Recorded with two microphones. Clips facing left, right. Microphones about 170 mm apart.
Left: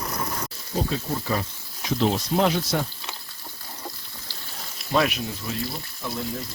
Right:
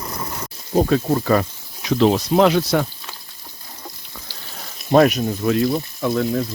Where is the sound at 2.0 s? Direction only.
80° right.